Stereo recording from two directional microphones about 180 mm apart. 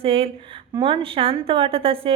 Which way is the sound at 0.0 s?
30° right (ahead or behind).